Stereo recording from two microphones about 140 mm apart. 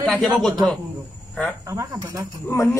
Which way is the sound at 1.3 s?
10° left (ahead or behind).